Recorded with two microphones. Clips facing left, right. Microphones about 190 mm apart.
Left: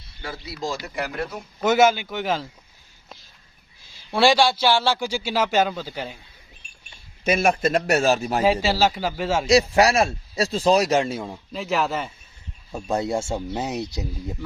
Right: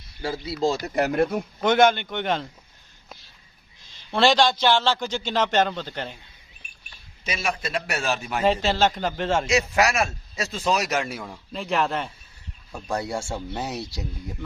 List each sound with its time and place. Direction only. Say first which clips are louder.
0.4 s speech: right 6 dB; 30° right (ahead or behind)
0.8 s speech: right 7 dB; 45° right (ahead or behind)
1.6 s speech: left 1 dB; 5° left (ahead or behind)
3.8 s a man's voice: left 2 dB; 10° left (ahead or behind)
7.3 s speech: left 9 dB; 50° left (ahead or behind)
8.4 s a man's voice: even; 10° left (ahead or behind)
9.5 s speech: left 9 dB; 35° left (ahead or behind)
11.5 s speech: left 1 dB; centre (ahead or behind)
12.7 s speech: left 4 dB; 20° left (ahead or behind)